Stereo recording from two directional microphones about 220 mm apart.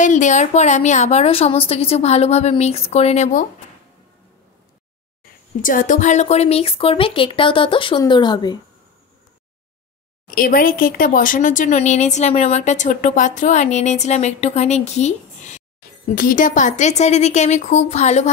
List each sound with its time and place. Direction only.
0.0 s a woman's voice: 35° left (ahead or behind)
5.6 s a woman's voice: 40° left (ahead or behind); by 8.5 s 20° left (ahead or behind)
10.3 s speech: 40° left (ahead or behind)